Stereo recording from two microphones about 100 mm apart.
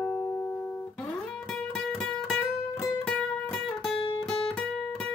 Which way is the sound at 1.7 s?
5° left (ahead or behind).